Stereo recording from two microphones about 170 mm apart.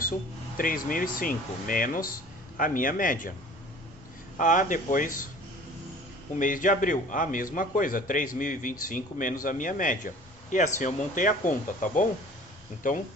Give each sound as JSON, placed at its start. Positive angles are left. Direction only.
{"t": 0.5, "sound": "a man's voice", "side_deg": 55}
{"t": 4.4, "sound": "a man's voice", "side_deg": 50}
{"t": 6.4, "sound": "a man's voice", "side_deg": 50}